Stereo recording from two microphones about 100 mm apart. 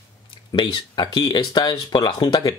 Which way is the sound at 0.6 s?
50° left (ahead or behind).